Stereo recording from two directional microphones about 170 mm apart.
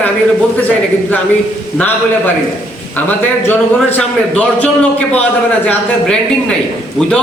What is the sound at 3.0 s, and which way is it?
Speech, 10° left (ahead or behind).